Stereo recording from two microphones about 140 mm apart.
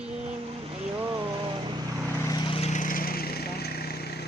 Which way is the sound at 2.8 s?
85° left.